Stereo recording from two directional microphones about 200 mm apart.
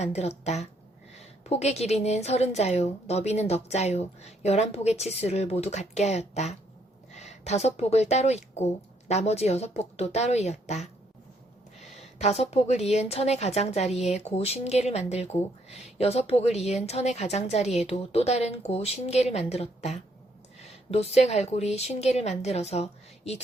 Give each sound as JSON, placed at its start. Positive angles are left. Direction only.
{"t": 0.0, "sound": "a woman's voice", "side_deg": 35}
{"t": 12.2, "sound": "a woman's voice", "side_deg": 30}